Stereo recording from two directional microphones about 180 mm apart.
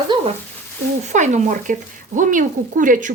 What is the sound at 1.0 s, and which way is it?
A woman's voice, 40° right (ahead or behind).